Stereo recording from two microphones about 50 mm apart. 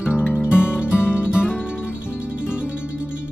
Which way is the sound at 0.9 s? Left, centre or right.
Left.